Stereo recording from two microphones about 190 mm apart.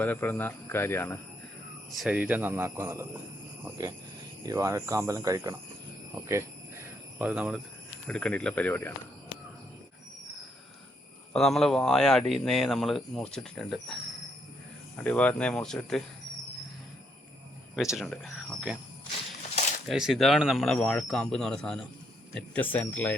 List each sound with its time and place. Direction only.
0.0 s speech: 10° left (ahead or behind)
1.9 s speech: 5° right (ahead or behind)
6.1 s cricket: 15° right (ahead or behind)
8.0 s speech: 5° left (ahead or behind)
11.3 s speech: centre (ahead or behind)
17.9 s speech: 5° left (ahead or behind)
19.9 s speech: centre (ahead or behind)